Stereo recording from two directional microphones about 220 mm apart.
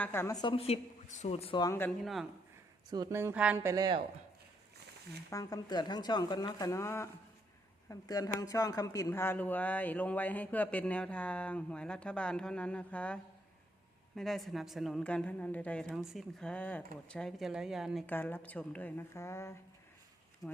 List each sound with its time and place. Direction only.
0.0 s a woman's voice: 10° left (ahead or behind)
2.9 s speech: 15° right (ahead or behind)
5.3 s speech: 15° left (ahead or behind)
14.2 s a woman's voice: centre (ahead or behind)